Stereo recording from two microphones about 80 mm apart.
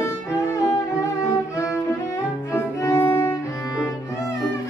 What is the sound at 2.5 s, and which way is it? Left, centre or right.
Music, left.